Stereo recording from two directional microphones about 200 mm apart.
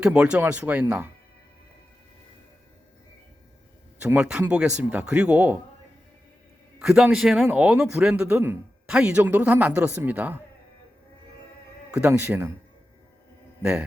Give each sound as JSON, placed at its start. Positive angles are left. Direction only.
{"t": 0.0, "sound": "speech", "side_deg": -5}
{"t": 4.0, "sound": "speech", "side_deg": -5}
{"t": 6.7, "sound": "a man's voice", "side_deg": -5}
{"t": 11.9, "sound": "speech", "side_deg": -5}
{"t": 13.6, "sound": "a man's voice", "side_deg": -5}